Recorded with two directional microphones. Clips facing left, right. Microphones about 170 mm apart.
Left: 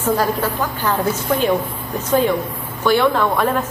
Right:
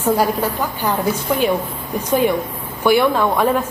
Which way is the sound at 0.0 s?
10° right (ahead or behind).